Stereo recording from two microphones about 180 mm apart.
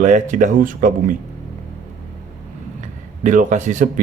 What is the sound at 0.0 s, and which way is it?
Speech, 45° right (ahead or behind).